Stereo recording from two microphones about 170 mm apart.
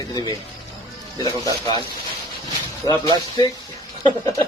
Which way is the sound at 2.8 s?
20° left (ahead or behind).